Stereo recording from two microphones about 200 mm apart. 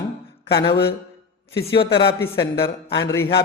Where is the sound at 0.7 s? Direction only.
55° left (ahead or behind).